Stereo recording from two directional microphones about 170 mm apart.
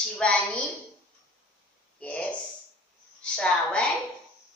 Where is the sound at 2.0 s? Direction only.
5° left (ahead or behind).